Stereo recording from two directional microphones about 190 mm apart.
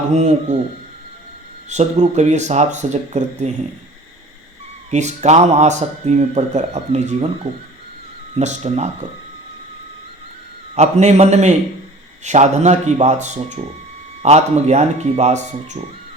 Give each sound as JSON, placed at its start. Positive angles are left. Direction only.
{"t": 0.1, "sound": "a man's voice", "side_deg": -35}
{"t": 1.7, "sound": "a man's voice", "side_deg": -35}
{"t": 4.9, "sound": "a man's voice", "side_deg": -35}
{"t": 8.4, "sound": "a man's voice", "side_deg": -35}
{"t": 10.8, "sound": "a man's voice", "side_deg": -35}